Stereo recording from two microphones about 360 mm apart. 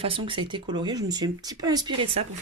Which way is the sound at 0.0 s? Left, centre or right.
Centre.